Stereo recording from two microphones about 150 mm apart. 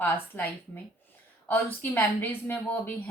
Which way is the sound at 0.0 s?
15° left (ahead or behind).